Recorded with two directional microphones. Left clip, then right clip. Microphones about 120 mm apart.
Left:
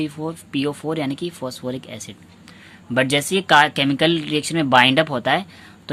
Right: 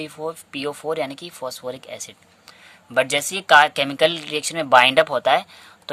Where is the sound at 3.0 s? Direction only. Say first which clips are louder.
Left 1 dB; 30° right (ahead or behind).